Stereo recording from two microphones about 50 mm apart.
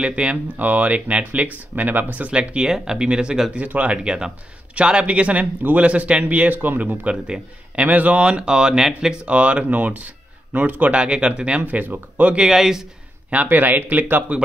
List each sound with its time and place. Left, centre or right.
0.0 s speech: right
0.6 s speech: right
3.5 s speech: right
7.1 s a man's voice: centre
7.8 s speech: right; by 9.1 s centre
9.2 s speech: right
11.6 s speech: right
12.4 s speech: centre
13.3 s speech: right